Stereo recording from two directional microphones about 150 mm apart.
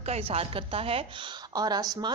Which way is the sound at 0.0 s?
40° right (ahead or behind).